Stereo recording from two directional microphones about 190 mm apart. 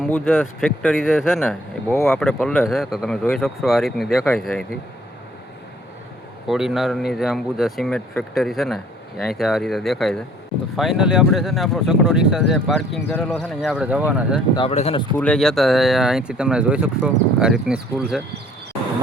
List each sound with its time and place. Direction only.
0.0 s speech: 10° left (ahead or behind)
1.9 s speech: 10° left (ahead or behind)
6.5 s speech: centre (ahead or behind)
14.5 s speech: 30° left (ahead or behind)
15.1 s speech: 5° left (ahead or behind)